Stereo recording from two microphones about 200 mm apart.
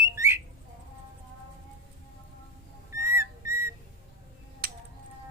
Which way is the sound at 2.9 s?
15° right (ahead or behind).